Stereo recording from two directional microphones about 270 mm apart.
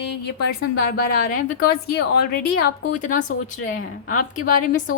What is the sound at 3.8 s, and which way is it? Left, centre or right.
Speech, left.